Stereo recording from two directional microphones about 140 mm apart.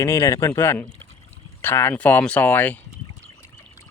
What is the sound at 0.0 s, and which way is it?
Speech, 20° left (ahead or behind).